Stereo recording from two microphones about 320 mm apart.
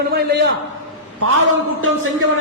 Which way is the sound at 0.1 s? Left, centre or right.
Right.